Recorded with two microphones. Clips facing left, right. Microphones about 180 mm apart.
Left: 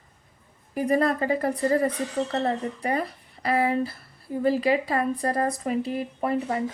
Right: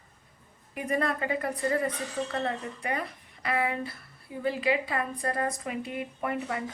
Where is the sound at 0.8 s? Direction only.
35° left (ahead or behind).